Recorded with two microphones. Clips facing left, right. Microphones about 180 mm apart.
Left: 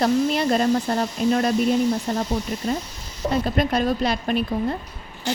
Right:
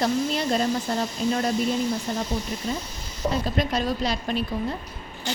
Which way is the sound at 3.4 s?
55° left (ahead or behind).